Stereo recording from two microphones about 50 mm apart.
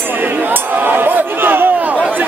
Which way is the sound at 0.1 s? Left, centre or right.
Right.